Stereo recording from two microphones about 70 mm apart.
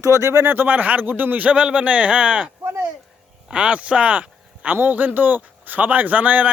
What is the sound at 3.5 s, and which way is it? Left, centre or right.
Speech, centre.